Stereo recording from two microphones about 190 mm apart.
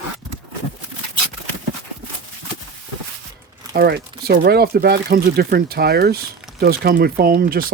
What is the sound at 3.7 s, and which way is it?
Speech, 55° right (ahead or behind).